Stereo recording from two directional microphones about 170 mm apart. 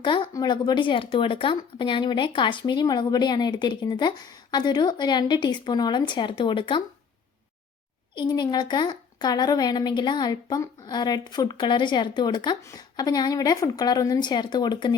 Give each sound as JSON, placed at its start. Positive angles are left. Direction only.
{"t": 0.0, "sound": "a woman's voice", "side_deg": 25}
{"t": 8.1, "sound": "a woman's voice", "side_deg": 25}